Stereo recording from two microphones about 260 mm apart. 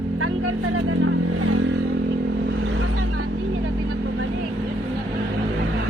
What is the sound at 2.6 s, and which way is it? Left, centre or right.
Vehicle, right.